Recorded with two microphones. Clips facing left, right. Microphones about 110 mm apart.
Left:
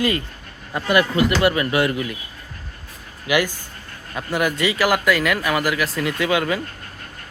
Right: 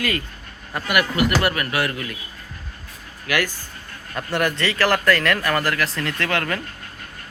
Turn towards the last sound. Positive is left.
turn(degrees=10)  # may be behind; listen again after turning